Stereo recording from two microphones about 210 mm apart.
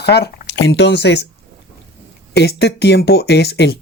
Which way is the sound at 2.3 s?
50° left (ahead or behind).